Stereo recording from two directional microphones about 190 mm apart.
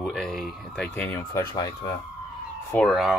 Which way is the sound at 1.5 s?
20° left (ahead or behind).